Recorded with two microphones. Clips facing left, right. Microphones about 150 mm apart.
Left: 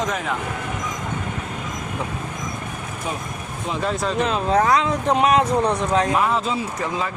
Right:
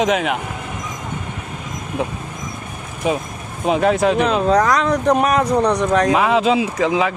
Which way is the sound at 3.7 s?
70° right (ahead or behind).